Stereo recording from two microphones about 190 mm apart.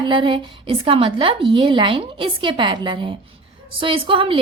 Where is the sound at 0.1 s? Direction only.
25° right (ahead or behind).